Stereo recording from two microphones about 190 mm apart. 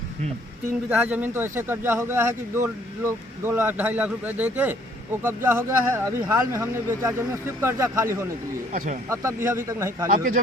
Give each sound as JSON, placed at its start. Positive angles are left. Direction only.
{"t": 0.9, "sound": "a man's voice", "side_deg": -10}
{"t": 8.7, "sound": "speech", "side_deg": -45}
{"t": 9.0, "sound": "a man's voice", "side_deg": -15}